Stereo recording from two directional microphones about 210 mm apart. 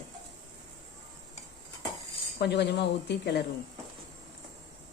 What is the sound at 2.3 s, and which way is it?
Speech, 55° left (ahead or behind).